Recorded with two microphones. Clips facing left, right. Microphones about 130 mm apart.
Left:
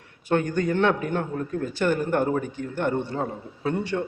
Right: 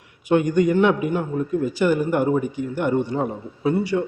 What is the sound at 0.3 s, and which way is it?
A man's voice, 15° right (ahead or behind).